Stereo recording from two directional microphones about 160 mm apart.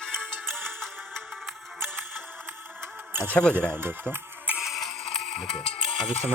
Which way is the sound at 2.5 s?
15° right (ahead or behind).